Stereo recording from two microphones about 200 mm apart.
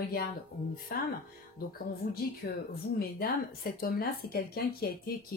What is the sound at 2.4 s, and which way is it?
A woman's voice, 50° left (ahead or behind).